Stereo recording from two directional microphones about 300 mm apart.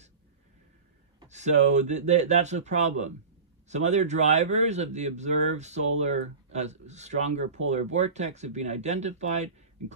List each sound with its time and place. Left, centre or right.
1.3 s speech: right